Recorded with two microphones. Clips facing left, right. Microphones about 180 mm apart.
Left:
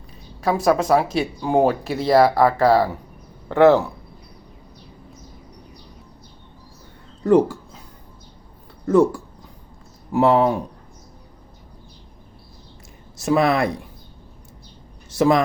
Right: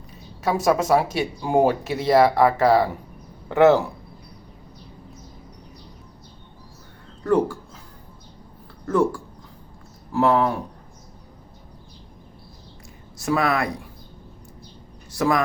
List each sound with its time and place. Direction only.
0.4 s speech: centre (ahead or behind)
7.3 s speech: 20° left (ahead or behind)
8.9 s speech: 20° left (ahead or behind)
13.1 s speech: 25° left (ahead or behind)
15.1 s speech: 25° left (ahead or behind)